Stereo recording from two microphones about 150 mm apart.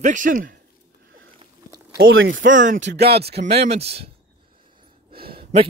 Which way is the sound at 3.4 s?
45° right (ahead or behind).